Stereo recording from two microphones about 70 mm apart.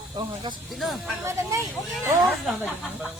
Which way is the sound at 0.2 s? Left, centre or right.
Right.